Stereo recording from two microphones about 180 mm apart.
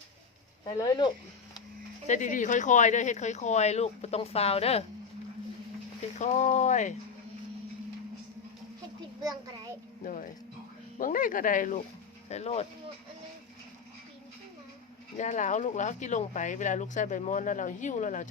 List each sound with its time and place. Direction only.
0.6 s speech: 25° left (ahead or behind)
2.0 s speech: 45° left (ahead or behind)
6.1 s speech: 40° left (ahead or behind)
10.0 s speech: 45° left (ahead or behind)
15.2 s speech: 40° left (ahead or behind)